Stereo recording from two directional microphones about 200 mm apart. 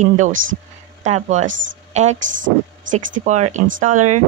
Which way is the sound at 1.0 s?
35° right (ahead or behind).